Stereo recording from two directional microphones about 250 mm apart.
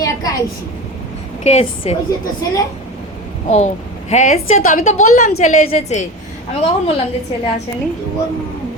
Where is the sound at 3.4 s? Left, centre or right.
Left.